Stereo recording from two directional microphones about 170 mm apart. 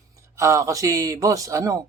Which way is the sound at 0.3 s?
20° right (ahead or behind).